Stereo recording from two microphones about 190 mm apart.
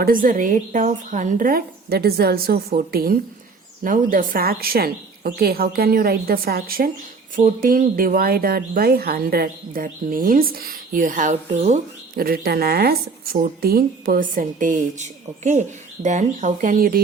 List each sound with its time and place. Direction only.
0.0 s speech: 45° right (ahead or behind)